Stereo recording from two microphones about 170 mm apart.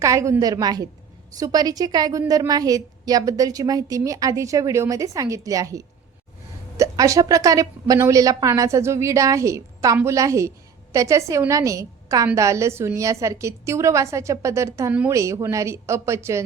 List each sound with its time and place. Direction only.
0.0 s a woman's voice: 20° right (ahead or behind)